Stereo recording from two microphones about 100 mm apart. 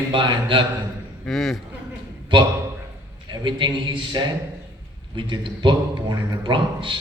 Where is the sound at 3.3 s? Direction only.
50° right (ahead or behind).